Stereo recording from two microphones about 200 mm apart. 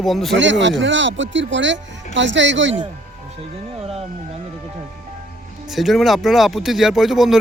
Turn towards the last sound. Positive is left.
turn(degrees=0)  # may be behind; listen again after turning